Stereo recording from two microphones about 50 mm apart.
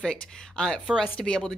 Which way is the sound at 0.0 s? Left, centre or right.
Centre.